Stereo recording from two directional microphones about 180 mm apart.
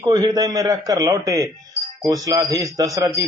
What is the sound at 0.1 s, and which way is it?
A man's voice, 20° right (ahead or behind).